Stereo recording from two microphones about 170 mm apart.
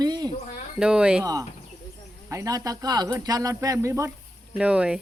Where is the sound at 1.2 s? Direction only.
20° right (ahead or behind).